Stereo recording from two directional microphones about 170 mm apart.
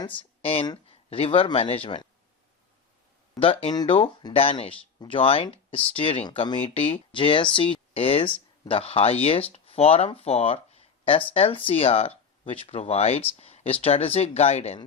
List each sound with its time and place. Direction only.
0.2 s speech: 35° left (ahead or behind)
3.3 s speech: 30° left (ahead or behind)
13.4 s a sound: 40° left (ahead or behind)
13.8 s speech: 35° left (ahead or behind)